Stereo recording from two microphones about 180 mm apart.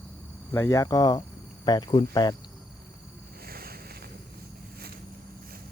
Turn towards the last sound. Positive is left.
turn(degrees=-60)  # may be behind; listen again after turning